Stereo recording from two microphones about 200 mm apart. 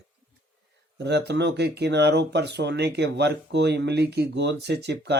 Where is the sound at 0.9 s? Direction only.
60° right (ahead or behind).